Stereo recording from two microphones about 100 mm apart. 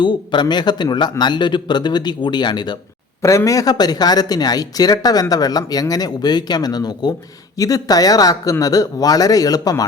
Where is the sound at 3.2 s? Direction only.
30° left (ahead or behind).